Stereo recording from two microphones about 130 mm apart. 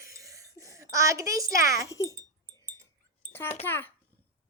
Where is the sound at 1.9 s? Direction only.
25° left (ahead or behind).